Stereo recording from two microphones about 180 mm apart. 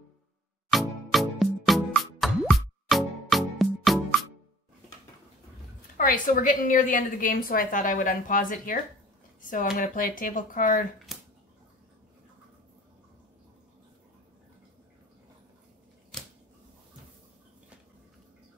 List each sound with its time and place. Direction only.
0.7 s music: centre (ahead or behind)
5.9 s a woman's voice: 50° left (ahead or behind)
11.1 s a sound: centre (ahead or behind)